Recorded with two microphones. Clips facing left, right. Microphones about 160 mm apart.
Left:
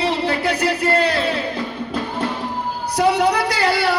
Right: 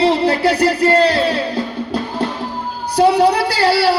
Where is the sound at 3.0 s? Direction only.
30° right (ahead or behind).